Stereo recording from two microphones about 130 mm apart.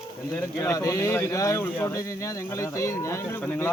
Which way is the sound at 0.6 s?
25° left (ahead or behind).